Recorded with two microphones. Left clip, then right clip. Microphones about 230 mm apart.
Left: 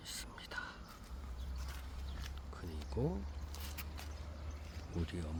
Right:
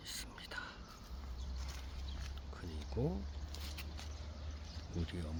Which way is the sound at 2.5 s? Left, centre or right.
Centre.